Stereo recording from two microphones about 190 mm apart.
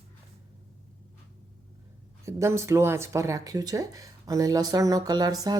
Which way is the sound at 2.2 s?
15° right (ahead or behind).